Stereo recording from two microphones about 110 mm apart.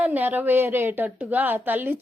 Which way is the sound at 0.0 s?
15° right (ahead or behind).